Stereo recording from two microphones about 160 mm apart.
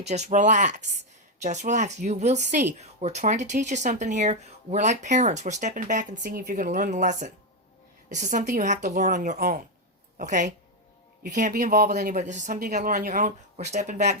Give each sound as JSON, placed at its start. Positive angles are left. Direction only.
{"t": 0.1, "sound": "speech", "side_deg": -45}
{"t": 11.5, "sound": "speech", "side_deg": -70}
{"t": 12.1, "sound": "speech", "side_deg": -50}